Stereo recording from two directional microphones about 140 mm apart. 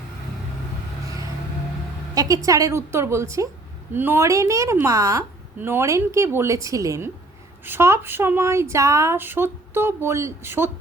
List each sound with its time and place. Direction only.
2.1 s a woman's voice: 25° right (ahead or behind)